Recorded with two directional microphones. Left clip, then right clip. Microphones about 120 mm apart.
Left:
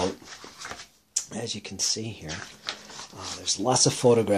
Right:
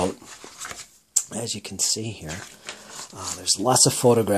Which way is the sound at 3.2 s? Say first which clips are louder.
Right 4 dB; 45° right (ahead or behind).